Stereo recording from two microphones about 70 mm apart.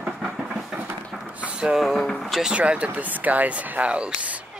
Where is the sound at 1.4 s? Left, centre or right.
Centre.